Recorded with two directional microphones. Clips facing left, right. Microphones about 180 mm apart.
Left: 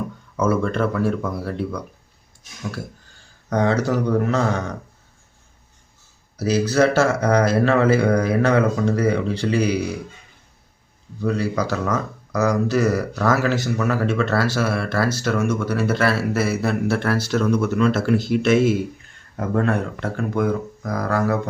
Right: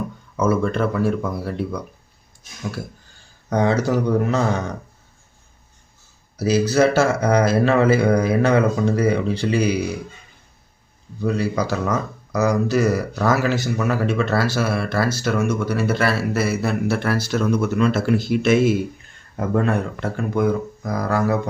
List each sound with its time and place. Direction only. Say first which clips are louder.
0.3 s speech: right 1 dB; 5° right (ahead or behind)
3.5 s speech: right 1 dB; 10° right (ahead or behind)
6.3 s speech: right 1 dB; 10° right (ahead or behind)
11.2 s speech: right 1 dB; 5° right (ahead or behind)